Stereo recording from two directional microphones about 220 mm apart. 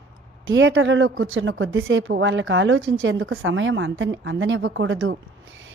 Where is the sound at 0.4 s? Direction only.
55° right (ahead or behind).